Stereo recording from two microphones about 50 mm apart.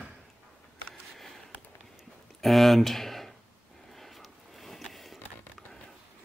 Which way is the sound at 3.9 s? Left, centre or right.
Centre.